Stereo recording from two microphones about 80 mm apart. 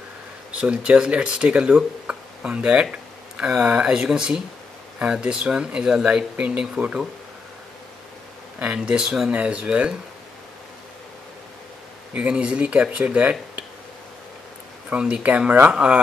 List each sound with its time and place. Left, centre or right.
0.6 s speech: centre
8.5 s speech: centre
12.1 s speech: centre
14.9 s speech: centre